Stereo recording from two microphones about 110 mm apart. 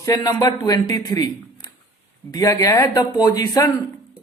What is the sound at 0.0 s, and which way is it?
A man's voice, 30° left (ahead or behind).